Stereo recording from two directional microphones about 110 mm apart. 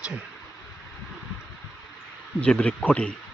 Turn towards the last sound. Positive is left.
turn(degrees=10)  # may be behind; listen again after turning